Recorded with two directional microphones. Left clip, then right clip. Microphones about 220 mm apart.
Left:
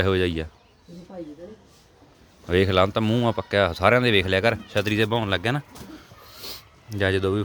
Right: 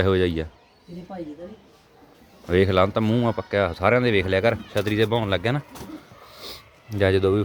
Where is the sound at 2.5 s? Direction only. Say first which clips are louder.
Right 1 dB; 5° left (ahead or behind).